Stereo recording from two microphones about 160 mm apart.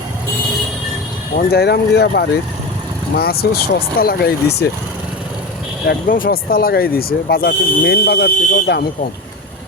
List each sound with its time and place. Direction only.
1.4 s speech: 80° left
3.2 s speech: 75° left (ahead or behind); by 4.7 s 90° left
5.8 s speech: 75° left (ahead or behind)